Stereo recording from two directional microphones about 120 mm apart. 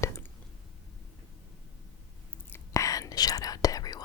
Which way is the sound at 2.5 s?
30° left (ahead or behind).